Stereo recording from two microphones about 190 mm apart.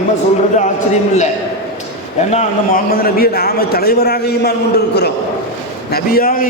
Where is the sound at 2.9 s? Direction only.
50° left (ahead or behind).